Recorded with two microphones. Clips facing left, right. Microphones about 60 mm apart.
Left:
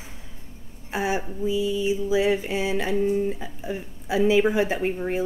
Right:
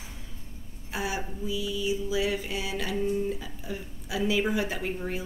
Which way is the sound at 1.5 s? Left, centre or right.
Left.